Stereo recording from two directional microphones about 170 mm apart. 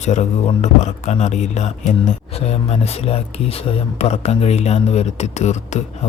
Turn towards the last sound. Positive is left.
turn(degrees=40)  # may be behind; listen again after turning